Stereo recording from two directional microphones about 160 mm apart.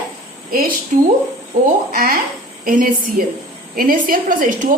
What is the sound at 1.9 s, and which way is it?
A woman's voice, 65° right (ahead or behind).